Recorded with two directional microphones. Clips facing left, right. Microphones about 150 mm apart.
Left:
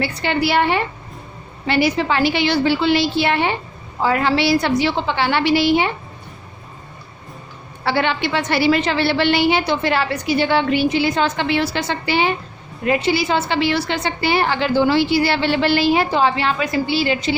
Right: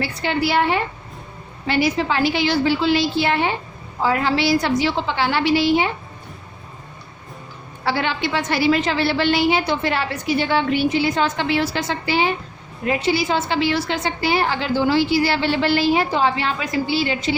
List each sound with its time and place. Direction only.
0.0 s a woman's voice: 70° left (ahead or behind)
7.9 s a woman's voice: 65° left (ahead or behind)